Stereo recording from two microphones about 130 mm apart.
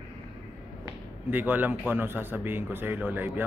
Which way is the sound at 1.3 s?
15° right (ahead or behind).